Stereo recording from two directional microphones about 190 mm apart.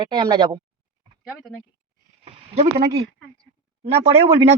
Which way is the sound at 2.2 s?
35° right (ahead or behind).